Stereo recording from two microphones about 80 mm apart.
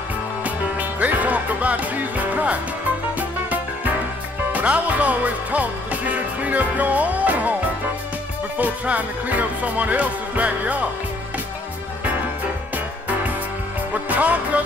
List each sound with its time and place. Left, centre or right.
0.4 s music: centre
8.5 s music: centre
13.9 s music: centre